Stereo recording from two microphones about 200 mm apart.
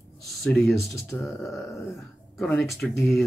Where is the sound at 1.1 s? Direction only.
10° left (ahead or behind).